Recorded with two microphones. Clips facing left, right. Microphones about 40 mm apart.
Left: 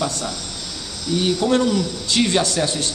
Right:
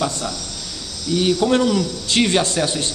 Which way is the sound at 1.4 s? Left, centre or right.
Centre.